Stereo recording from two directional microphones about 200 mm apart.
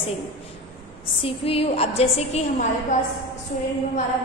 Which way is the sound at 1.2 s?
30° left (ahead or behind).